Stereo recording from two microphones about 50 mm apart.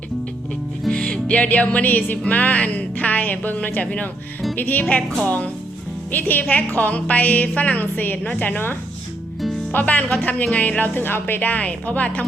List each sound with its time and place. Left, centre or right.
0.9 s music: centre; by 8.7 s left
9.7 s music: left